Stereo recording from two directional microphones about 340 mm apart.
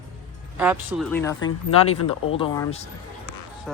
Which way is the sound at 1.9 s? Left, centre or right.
Left.